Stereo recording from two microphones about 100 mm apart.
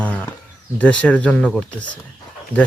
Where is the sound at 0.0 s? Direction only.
15° left (ahead or behind).